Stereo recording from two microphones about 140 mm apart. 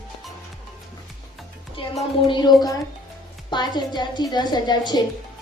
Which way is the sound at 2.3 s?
30° left (ahead or behind).